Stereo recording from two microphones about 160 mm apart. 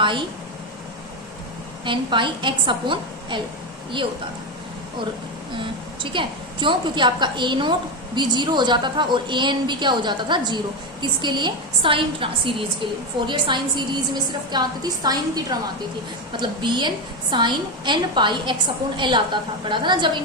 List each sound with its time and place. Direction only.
1.8 s a woman's voice: 30° right (ahead or behind)
5.5 s a woman's voice: 30° right (ahead or behind)